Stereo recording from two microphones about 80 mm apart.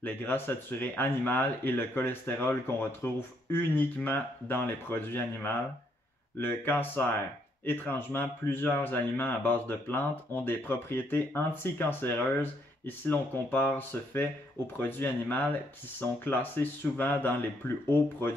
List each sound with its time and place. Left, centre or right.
0.0 s speech: left